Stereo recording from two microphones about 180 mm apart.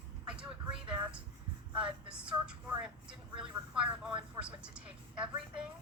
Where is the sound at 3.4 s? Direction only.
5° right (ahead or behind).